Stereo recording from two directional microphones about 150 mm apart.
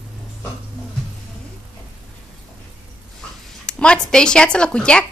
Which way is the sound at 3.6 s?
5° left (ahead or behind).